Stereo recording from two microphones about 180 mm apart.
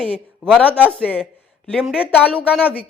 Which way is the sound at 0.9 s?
5° left (ahead or behind).